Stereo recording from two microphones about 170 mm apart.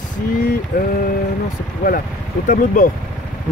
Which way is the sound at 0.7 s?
55° left (ahead or behind).